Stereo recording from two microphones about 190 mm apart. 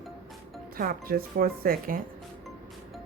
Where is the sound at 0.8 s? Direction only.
50° right (ahead or behind).